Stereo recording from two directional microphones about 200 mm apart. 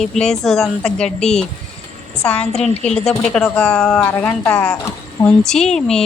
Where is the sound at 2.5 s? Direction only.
35° left (ahead or behind).